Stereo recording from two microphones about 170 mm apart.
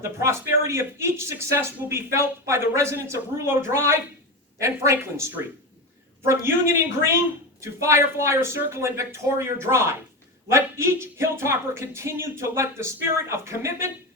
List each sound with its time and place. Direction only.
0.0 s speech: 15° right (ahead or behind)